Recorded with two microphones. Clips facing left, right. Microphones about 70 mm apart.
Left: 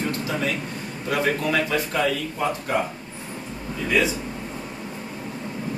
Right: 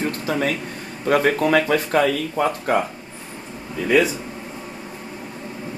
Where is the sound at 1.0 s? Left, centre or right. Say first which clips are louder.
Right 6 dB; right.